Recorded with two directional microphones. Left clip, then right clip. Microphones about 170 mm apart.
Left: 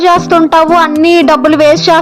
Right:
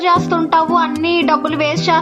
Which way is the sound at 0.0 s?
45° left (ahead or behind).